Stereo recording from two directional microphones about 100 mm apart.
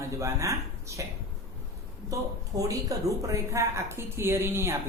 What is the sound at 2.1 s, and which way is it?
Speech, 35° right (ahead or behind).